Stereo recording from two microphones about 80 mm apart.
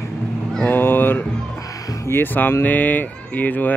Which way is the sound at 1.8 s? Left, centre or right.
Left.